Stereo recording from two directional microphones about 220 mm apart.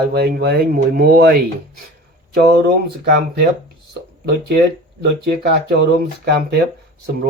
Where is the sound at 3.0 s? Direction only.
50° right (ahead or behind).